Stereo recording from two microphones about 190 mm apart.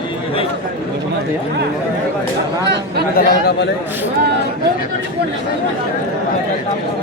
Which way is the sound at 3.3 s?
55° left (ahead or behind).